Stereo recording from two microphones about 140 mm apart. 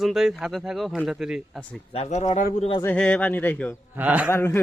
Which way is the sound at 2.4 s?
75° left (ahead or behind).